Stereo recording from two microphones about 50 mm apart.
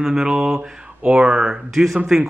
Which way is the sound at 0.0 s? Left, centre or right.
Centre.